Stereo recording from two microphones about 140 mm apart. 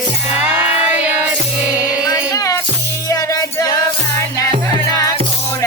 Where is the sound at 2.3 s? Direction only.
20° left (ahead or behind).